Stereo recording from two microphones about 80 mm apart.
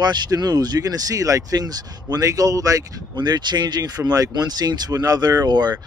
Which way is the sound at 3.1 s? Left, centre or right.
Right.